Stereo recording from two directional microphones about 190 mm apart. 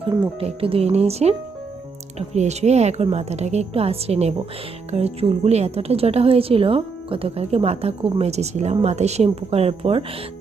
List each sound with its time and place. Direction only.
0.3 s a woman's voice: 30° right (ahead or behind)